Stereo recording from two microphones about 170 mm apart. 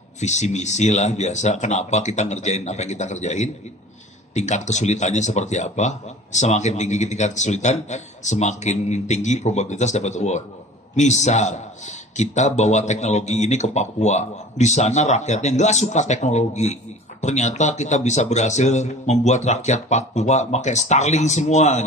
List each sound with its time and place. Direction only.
0.2 s speech: 45° left (ahead or behind)